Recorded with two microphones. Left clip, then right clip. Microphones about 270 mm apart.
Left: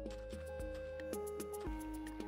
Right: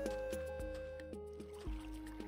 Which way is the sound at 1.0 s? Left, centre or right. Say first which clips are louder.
Left 6 dB; left.